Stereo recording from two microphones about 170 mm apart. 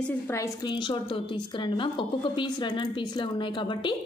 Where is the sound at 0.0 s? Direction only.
15° left (ahead or behind).